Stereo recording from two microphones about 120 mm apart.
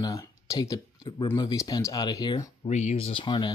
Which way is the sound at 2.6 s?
70° left (ahead or behind).